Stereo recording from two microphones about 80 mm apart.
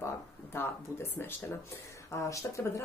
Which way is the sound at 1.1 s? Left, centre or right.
Left.